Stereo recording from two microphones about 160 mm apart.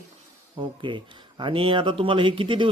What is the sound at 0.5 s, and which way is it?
A man's voice, 30° right (ahead or behind).